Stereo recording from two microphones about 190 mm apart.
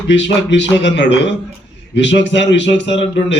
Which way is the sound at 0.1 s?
70° left (ahead or behind).